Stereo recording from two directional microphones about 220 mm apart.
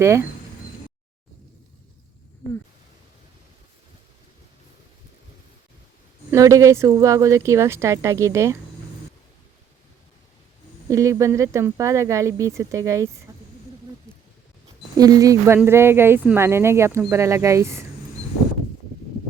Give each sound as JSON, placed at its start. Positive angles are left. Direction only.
{"t": 0.0, "sound": "speech", "side_deg": -10}
{"t": 6.3, "sound": "speech", "side_deg": -15}
{"t": 10.8, "sound": "speech", "side_deg": -15}
{"t": 13.3, "sound": "a sound", "side_deg": -15}
{"t": 14.9, "sound": "speech", "side_deg": -15}